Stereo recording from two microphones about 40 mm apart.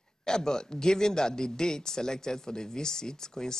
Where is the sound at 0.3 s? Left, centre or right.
Centre.